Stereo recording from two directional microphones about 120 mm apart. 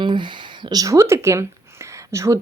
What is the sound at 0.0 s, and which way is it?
Speech, 40° right (ahead or behind).